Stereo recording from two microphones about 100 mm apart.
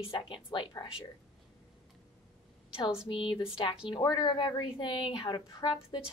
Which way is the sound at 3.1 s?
55° left (ahead or behind).